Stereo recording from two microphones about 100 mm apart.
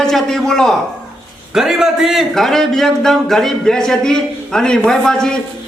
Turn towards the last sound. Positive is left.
turn(degrees=5)  # may be behind; listen again after turning